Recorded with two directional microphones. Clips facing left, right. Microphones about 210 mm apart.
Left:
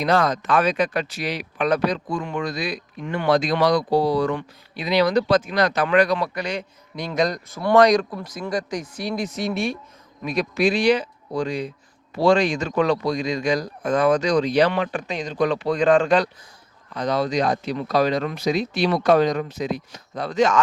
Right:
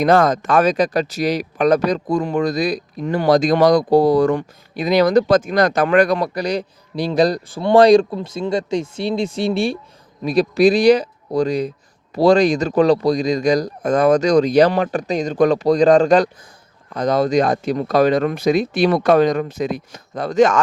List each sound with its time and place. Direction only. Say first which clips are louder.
0.0 s speech: right 6 dB; 50° right (ahead or behind)